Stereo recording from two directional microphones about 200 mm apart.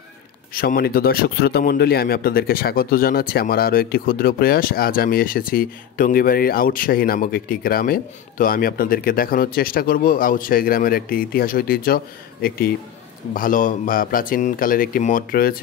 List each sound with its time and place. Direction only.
0.6 s a man's voice: 50° left (ahead or behind)